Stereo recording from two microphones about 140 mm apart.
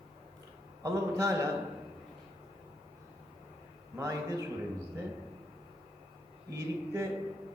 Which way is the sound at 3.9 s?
20° right (ahead or behind).